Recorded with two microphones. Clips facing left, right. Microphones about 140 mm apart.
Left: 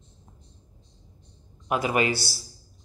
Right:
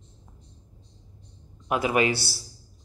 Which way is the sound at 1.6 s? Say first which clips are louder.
Even; centre (ahead or behind).